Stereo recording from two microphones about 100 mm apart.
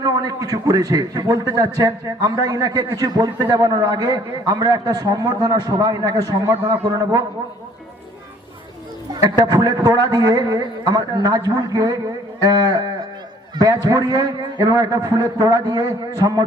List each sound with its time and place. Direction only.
0.0 s a man's voice: 40° right (ahead or behind)
9.1 s a man's voice: 45° right (ahead or behind)